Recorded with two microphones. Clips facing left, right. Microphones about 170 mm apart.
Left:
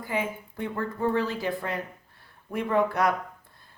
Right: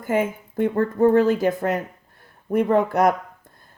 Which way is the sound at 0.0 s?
45° right (ahead or behind).